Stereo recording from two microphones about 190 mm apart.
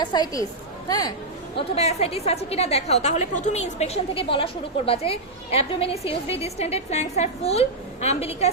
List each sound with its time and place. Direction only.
0.0 s a woman's voice: 20° left (ahead or behind)
1.5 s a woman's voice: 35° left (ahead or behind)